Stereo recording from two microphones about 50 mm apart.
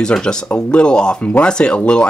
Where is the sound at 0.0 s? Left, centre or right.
Centre.